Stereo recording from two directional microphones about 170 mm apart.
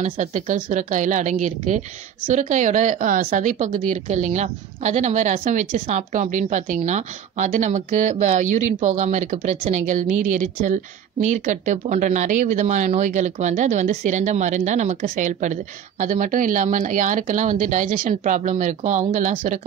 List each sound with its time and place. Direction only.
0.0 s a woman's voice: 45° right (ahead or behind)